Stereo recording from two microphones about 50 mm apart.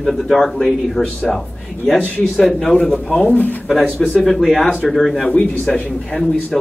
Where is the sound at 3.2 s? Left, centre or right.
Left.